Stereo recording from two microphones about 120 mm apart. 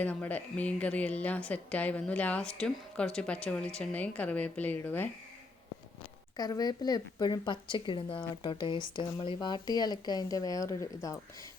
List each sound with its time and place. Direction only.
0.0 s a woman's voice: 15° left (ahead or behind)
6.3 s speech: 35° left (ahead or behind)